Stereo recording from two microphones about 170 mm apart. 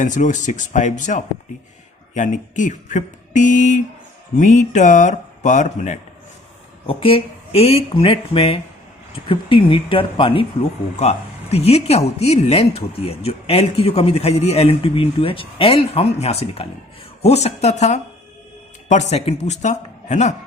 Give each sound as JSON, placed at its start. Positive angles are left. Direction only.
{"t": 0.0, "sound": "speech", "side_deg": 45}
{"t": 6.8, "sound": "speech", "side_deg": 35}